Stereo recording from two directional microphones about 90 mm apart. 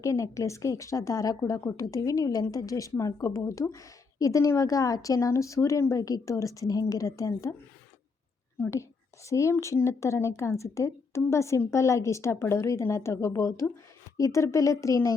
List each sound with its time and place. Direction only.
0.0 s a woman's voice: 35° left (ahead or behind)
8.7 s a woman's voice: 35° left (ahead or behind)